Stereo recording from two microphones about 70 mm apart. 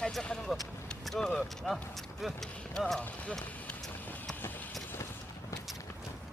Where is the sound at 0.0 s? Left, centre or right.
Centre.